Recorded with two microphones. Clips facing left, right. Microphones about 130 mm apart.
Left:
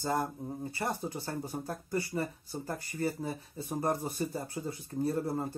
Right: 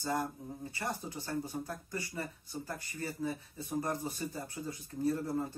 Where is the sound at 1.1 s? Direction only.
30° left (ahead or behind).